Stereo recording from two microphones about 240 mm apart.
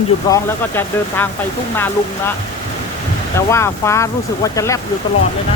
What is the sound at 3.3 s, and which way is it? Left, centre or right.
Speech, centre.